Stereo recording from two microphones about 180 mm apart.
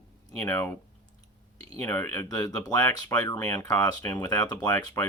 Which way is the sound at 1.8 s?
15° left (ahead or behind).